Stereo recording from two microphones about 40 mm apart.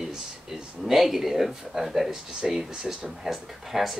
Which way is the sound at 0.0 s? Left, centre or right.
Centre.